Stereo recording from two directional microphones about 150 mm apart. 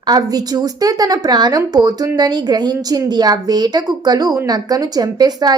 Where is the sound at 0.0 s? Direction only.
25° right (ahead or behind).